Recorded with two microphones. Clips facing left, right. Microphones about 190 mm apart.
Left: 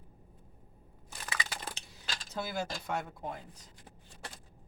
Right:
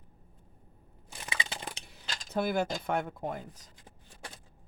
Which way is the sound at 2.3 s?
55° right (ahead or behind).